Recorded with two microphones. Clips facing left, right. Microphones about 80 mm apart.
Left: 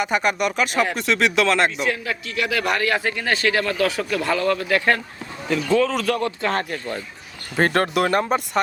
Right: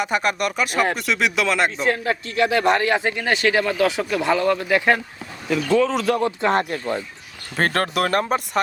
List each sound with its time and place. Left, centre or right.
0.0 s speech: centre
1.8 s a man's voice: right; by 4.9 s centre
5.5 s speech: centre
6.1 s a man's voice: right
7.5 s speech: centre